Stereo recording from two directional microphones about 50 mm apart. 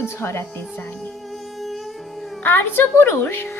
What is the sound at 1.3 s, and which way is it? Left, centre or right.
Music, centre.